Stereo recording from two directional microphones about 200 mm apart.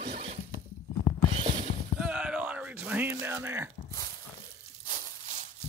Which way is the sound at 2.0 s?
5° right (ahead or behind).